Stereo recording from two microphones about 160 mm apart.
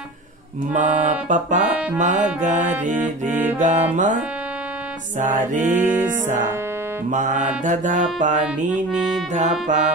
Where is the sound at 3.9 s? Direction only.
50° right (ahead or behind).